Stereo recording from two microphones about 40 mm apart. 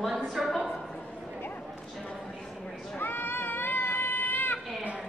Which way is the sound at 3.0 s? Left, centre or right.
Left.